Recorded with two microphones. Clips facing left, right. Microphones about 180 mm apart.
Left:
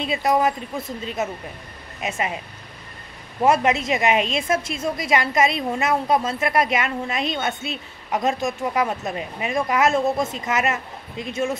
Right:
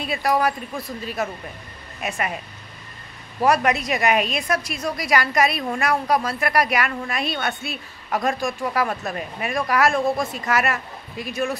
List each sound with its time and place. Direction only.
0.0 s a woman's voice: 20° left (ahead or behind)
3.3 s a woman's voice: 25° left (ahead or behind)